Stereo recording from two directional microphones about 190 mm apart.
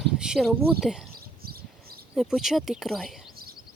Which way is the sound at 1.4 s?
50° right (ahead or behind).